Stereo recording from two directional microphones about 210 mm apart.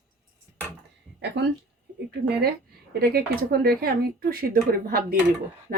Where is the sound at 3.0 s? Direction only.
45° right (ahead or behind).